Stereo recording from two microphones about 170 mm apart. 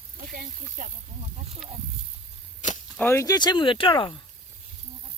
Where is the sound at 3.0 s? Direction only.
15° left (ahead or behind).